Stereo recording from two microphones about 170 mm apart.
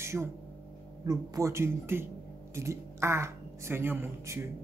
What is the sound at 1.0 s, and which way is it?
Speech, 20° right (ahead or behind).